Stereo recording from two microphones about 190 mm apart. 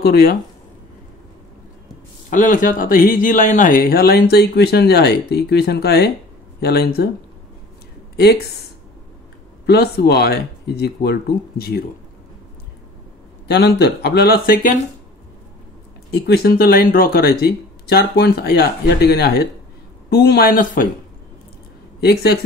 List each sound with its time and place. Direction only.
0.0 s speech: 55° left (ahead or behind)
2.2 s speech: 40° left (ahead or behind)
8.2 s speech: 55° left (ahead or behind)
9.7 s speech: 60° left (ahead or behind)
13.5 s speech: 60° left (ahead or behind)
16.1 s speech: 60° left (ahead or behind)
22.0 s speech: 60° left (ahead or behind)